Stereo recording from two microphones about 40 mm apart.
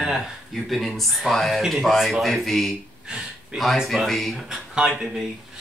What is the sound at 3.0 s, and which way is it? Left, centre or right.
Speech, centre.